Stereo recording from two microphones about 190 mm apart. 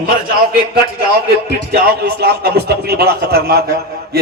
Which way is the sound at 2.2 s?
55° right (ahead or behind).